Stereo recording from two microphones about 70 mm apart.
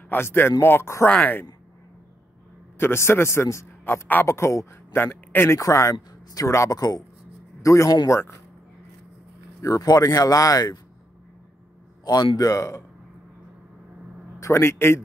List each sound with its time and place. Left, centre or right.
0.1 s a man's voice: left
1.0 s speech: left
2.8 s a man's voice: left
3.8 s a man's voice: left
5.6 s speech: left
7.6 s speech: left
9.6 s speech: left
12.0 s speech: left
14.4 s a man's voice: left